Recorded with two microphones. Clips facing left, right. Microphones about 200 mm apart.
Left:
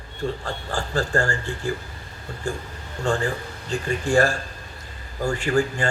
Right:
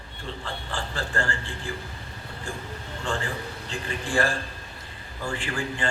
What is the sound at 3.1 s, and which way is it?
A man's voice, 45° left (ahead or behind).